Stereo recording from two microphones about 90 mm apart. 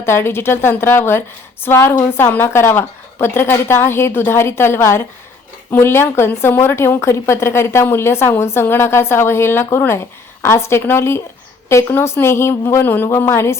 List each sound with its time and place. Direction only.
0.0 s a woman's voice: 25° left (ahead or behind)